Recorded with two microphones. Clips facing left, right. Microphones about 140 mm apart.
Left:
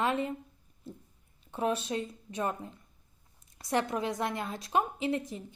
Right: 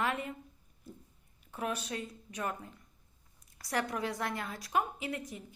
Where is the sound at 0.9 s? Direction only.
25° left (ahead or behind).